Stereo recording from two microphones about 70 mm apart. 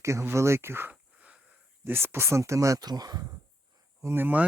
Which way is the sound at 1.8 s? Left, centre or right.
Right.